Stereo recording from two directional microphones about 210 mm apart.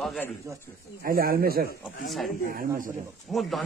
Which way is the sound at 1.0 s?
45° right (ahead or behind).